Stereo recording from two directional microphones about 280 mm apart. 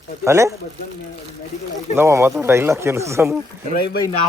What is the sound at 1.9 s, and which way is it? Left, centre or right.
Speech, centre.